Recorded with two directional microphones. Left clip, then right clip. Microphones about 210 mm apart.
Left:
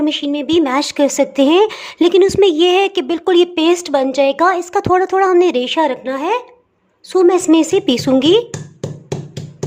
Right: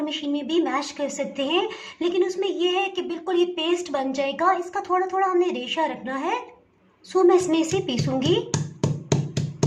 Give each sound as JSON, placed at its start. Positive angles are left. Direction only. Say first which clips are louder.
{"t": 0.0, "sound": "speech", "louder": "left 10 dB", "side_deg": 45}